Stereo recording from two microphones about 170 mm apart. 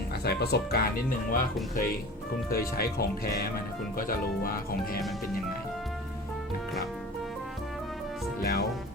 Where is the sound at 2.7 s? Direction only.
65° left (ahead or behind).